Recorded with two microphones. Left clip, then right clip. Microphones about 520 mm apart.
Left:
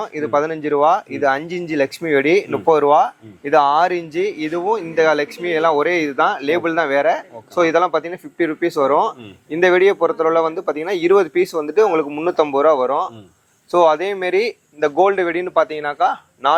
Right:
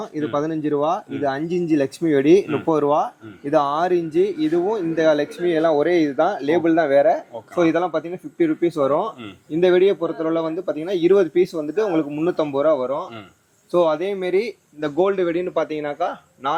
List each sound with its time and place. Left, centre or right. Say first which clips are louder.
0.0 s speech: left 5 dB; left